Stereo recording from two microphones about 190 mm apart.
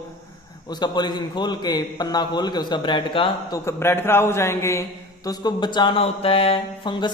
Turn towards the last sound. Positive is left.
turn(degrees=25)  # may be behind; listen again after turning